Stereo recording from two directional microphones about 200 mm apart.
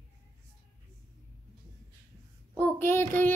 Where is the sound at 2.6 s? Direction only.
10° left (ahead or behind).